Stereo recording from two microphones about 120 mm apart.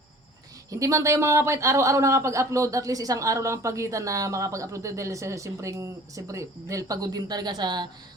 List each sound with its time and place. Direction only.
0.7 s speech: 25° right (ahead or behind)